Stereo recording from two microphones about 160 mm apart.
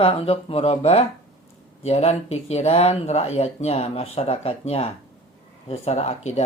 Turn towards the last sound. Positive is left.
turn(degrees=45)  # may be behind; listen again after turning